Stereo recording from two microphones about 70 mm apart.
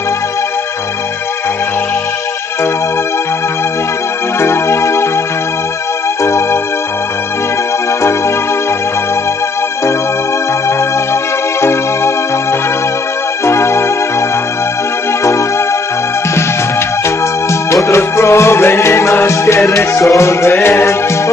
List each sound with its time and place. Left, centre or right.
4.4 s organ: left
6.2 s organ: left
11.6 s music: left
13.5 s music: left
17.8 s music: left